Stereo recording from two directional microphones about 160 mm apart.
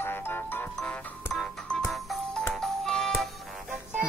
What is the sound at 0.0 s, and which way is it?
Music, 15° left (ahead or behind).